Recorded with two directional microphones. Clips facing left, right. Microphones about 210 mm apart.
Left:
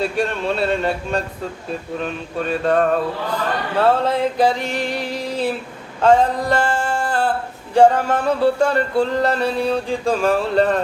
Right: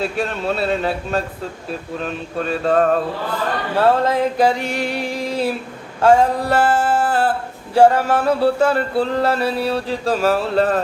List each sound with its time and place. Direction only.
0.0 s music: centre (ahead or behind)
3.8 s a sound: 10° right (ahead or behind)
6.0 s male singing: 10° right (ahead or behind)
7.8 s music: 10° right (ahead or behind)